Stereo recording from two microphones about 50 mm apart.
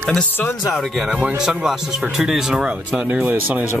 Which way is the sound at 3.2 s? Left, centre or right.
Right.